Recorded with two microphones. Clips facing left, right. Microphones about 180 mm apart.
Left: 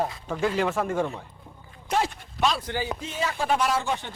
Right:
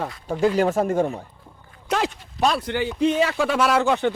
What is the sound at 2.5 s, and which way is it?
Speech, 65° right (ahead or behind).